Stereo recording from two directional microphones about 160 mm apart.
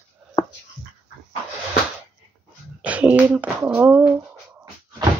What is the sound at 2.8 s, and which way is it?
Speech, 10° right (ahead or behind).